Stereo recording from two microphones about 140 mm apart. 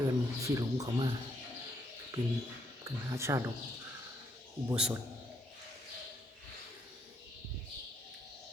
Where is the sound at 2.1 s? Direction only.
20° right (ahead or behind).